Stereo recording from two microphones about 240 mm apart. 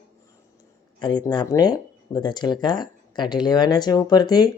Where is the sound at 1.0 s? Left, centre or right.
Centre.